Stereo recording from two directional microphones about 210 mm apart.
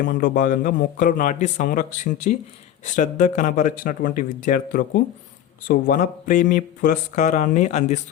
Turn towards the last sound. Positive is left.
turn(degrees=35)  # may be behind; listen again after turning